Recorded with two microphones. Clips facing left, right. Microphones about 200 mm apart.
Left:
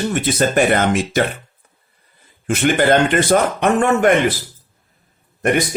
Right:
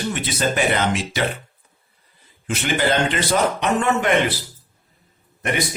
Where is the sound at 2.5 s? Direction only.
50° left (ahead or behind).